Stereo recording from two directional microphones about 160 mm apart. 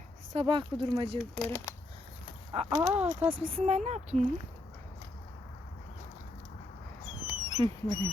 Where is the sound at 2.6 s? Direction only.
5° right (ahead or behind).